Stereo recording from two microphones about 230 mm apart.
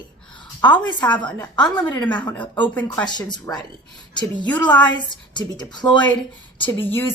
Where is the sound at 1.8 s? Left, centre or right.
Centre.